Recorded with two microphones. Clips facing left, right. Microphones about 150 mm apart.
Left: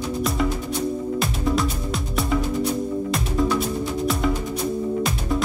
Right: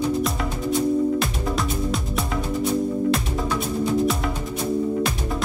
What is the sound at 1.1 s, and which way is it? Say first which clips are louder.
Music: left 1 dB; centre (ahead or behind).